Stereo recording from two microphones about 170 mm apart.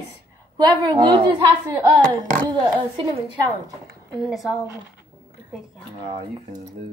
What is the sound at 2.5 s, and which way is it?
A woman's voice, 25° right (ahead or behind).